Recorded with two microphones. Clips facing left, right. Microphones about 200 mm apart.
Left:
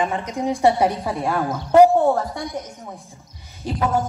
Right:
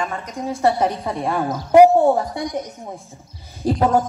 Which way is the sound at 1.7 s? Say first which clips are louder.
Right 2 dB; 15° right (ahead or behind).